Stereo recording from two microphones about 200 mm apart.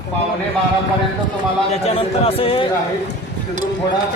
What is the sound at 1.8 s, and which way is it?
Speech, 30° left (ahead or behind).